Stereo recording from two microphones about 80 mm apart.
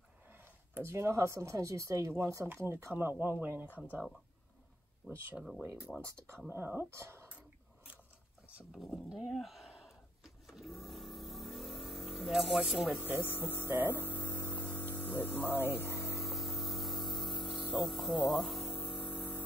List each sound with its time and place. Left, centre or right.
0.3 s speech: right
3.6 s speech: left
5.0 s speech: centre
6.5 s speech: right
7.2 s whispering: centre
8.7 s a sound: centre
13.2 s speech: left
13.7 s speech: right
13.9 s mains hum: left
15.8 s electric toothbrush: left
16.2 s spray: centre
19.0 s a sound: centre